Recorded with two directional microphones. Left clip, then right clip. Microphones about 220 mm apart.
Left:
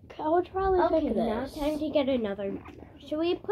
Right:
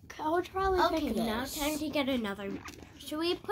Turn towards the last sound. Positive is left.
turn(degrees=-25)  # may be behind; listen again after turning